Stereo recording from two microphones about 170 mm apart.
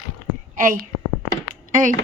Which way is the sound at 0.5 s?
50° right (ahead or behind).